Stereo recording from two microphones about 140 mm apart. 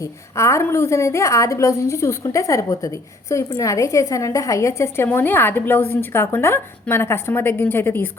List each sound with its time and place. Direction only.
0.0 s a woman's voice: 20° left (ahead or behind)